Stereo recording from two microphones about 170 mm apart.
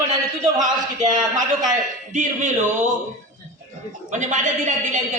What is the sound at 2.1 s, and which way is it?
Speech, 45° right (ahead or behind).